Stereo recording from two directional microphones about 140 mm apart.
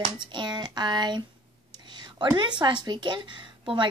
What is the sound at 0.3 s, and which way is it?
Speech, 30° right (ahead or behind).